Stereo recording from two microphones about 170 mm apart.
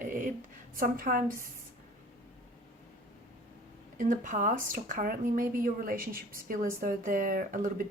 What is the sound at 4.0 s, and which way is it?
Speech, 50° right (ahead or behind).